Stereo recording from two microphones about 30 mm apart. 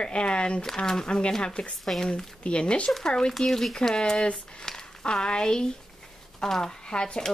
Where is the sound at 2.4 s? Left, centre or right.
Left.